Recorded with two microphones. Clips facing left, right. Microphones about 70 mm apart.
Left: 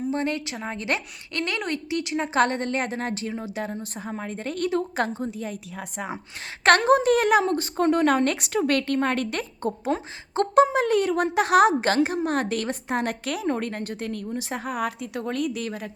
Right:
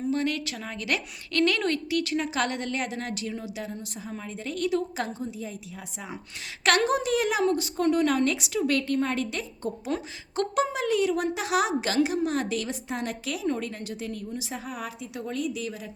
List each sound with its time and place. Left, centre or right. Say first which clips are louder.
0.1 s a woman's voice: left 1 dB; left
6.7 s a woman's voice: left 6 dB; left
9.9 s a woman's voice: left 3 dB; left